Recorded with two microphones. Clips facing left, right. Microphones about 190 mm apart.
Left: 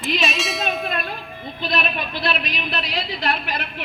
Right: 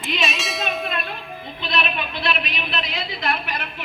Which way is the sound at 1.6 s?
40° left (ahead or behind).